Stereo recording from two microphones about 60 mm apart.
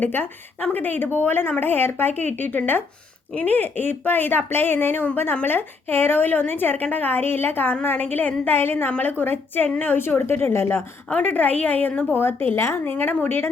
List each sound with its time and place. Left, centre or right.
0.0 s a woman's voice: left
9.6 s a woman's voice: left
9.9 s a woman's voice: left
11.1 s a woman's voice: left